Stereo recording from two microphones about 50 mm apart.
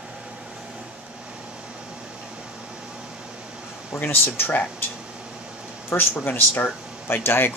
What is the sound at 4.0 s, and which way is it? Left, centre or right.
Speech, left.